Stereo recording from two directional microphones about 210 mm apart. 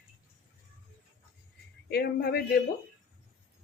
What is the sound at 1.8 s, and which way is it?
Speech, 50° left (ahead or behind).